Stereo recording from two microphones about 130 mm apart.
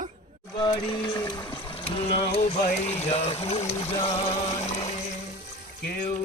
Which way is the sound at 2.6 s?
55° left (ahead or behind).